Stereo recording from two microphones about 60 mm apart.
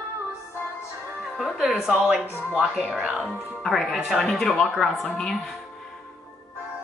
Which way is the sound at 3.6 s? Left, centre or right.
Centre.